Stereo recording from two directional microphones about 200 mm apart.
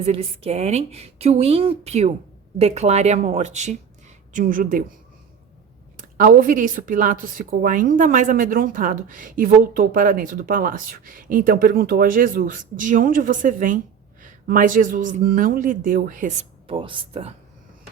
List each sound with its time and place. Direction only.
0.0 s speech: 30° right (ahead or behind)
6.0 s speech: 45° right (ahead or behind); by 17.3 s 30° right (ahead or behind)